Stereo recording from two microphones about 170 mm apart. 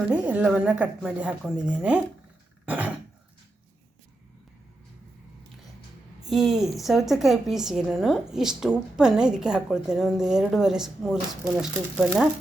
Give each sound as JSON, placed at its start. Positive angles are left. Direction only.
{"t": 0.1, "sound": "speech", "side_deg": -5}
{"t": 2.6, "sound": "throat clearing", "side_deg": -10}
{"t": 6.2, "sound": "a woman's voice", "side_deg": 0}